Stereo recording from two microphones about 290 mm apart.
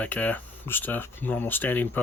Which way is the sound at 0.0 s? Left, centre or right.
Centre.